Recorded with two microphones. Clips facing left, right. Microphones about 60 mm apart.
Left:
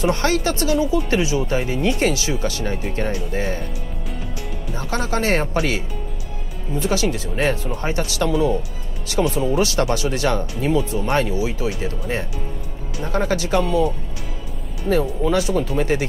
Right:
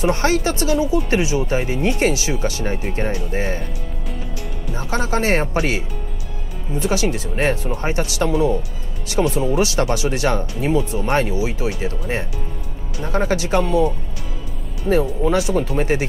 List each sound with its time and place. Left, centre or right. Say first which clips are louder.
0.0 s speech: right 1 dB; right
4.7 s speech: right 2 dB; right
15.2 s speech: left 1 dB; right
15.5 s speech: right 1 dB; right